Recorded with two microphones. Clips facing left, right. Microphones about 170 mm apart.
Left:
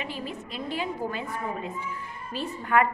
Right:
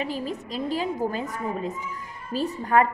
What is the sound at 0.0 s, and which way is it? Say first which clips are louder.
A woman's voice: right 5 dB; 40° right (ahead or behind).